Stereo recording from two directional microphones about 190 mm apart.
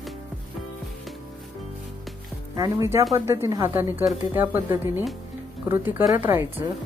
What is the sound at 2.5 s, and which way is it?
Speech, 20° right (ahead or behind).